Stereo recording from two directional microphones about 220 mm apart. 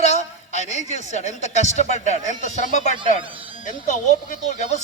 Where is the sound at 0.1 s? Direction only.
30° left (ahead or behind).